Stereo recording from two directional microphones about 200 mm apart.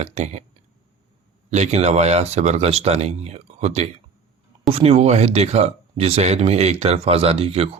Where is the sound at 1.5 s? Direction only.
35° right (ahead or behind).